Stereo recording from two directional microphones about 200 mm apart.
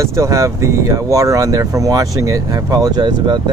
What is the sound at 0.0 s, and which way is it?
Speech, 15° right (ahead or behind).